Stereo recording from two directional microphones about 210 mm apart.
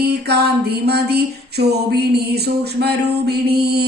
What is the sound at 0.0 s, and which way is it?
Music, 50° right (ahead or behind).